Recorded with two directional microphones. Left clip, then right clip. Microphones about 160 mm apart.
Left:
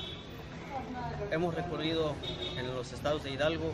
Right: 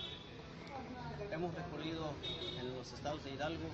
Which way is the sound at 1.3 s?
20° left (ahead or behind).